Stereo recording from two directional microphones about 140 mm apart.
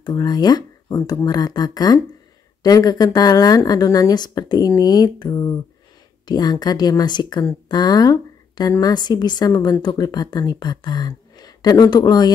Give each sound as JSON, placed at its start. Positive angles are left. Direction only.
{"t": 0.0, "sound": "speech", "side_deg": 30}